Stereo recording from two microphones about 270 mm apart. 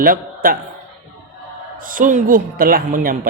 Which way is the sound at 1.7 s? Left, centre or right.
Right.